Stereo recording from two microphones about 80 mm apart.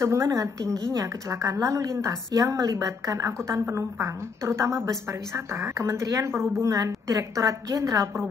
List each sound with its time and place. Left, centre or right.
0.0 s a woman's voice: right